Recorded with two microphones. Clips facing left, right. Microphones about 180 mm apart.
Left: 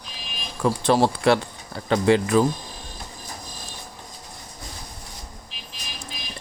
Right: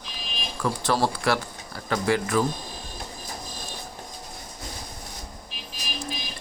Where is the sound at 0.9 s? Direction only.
20° left (ahead or behind).